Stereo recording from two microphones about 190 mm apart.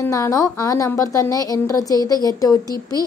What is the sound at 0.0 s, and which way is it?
A woman's voice, 15° left (ahead or behind).